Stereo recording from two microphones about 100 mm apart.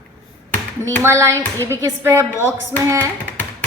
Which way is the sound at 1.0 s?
30° right (ahead or behind).